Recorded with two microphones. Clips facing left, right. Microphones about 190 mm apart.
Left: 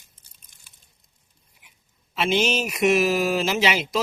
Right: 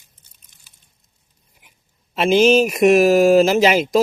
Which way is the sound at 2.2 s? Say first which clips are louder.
Right 9 dB; 45° right (ahead or behind).